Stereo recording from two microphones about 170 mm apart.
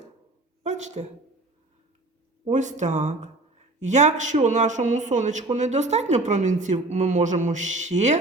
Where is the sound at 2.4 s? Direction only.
45° right (ahead or behind).